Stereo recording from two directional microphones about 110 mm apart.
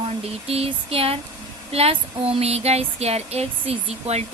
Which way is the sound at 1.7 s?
60° right (ahead or behind).